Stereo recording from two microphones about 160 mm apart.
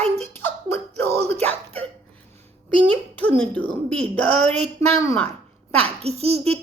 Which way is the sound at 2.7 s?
10° left (ahead or behind).